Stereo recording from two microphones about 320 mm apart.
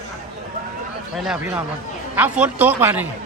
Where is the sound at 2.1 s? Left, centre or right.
Centre.